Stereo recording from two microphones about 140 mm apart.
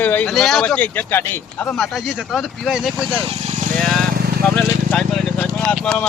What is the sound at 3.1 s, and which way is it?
Vehicle, 45° right (ahead or behind).